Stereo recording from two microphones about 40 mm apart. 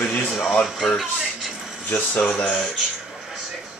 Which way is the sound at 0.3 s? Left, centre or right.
Centre.